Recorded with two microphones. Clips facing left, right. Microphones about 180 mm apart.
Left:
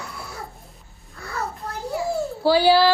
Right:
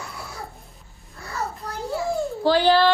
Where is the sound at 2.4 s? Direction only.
10° left (ahead or behind).